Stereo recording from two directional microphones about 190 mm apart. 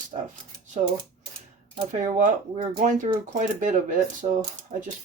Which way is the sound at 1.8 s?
40° right (ahead or behind).